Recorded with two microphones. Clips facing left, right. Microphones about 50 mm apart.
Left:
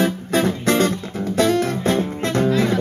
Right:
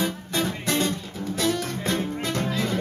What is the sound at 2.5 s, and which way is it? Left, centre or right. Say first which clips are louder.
Music: left 8 dB; left.